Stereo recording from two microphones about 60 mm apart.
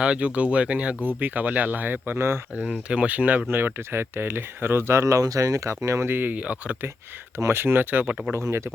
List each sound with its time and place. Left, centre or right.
0.0 s speech: centre
2.1 s speech: right
2.6 s speech: centre
3.5 s speech: right
6.4 s speech: right
7.3 s speech: right
8.3 s speech: right